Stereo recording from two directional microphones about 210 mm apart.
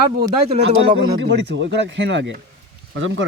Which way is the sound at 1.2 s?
55° right (ahead or behind).